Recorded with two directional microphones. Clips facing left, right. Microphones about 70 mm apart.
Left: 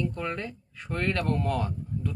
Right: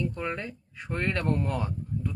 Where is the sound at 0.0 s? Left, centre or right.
Centre.